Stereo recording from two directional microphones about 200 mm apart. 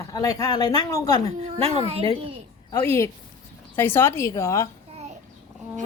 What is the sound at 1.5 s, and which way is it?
Speech, 30° right (ahead or behind).